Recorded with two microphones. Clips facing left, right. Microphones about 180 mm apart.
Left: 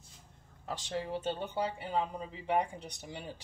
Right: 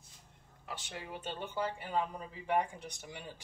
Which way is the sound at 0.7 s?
35° left (ahead or behind).